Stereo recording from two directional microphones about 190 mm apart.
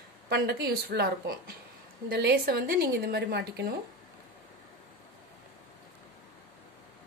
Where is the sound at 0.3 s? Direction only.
60° right (ahead or behind).